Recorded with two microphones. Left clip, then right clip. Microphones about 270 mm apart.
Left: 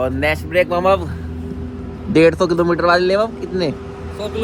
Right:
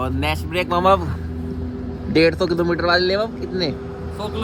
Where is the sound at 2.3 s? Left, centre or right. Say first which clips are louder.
Left 4 dB; left.